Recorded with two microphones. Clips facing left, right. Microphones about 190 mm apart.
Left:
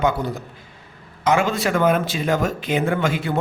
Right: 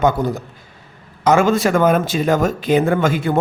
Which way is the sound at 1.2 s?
45° right (ahead or behind).